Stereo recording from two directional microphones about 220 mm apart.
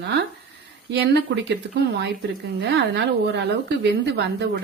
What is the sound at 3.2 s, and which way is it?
Speech, 50° right (ahead or behind).